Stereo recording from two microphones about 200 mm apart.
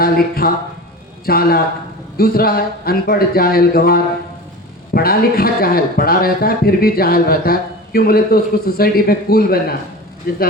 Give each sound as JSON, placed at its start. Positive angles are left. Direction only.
{"t": 0.0, "sound": "speech", "side_deg": 50}